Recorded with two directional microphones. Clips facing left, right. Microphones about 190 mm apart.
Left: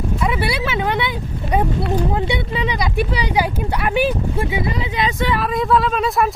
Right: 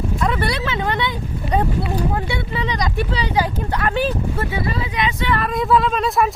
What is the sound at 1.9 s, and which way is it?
Speech, 20° left (ahead or behind).